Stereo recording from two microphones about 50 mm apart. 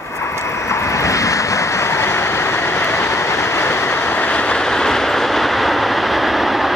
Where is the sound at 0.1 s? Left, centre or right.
Left.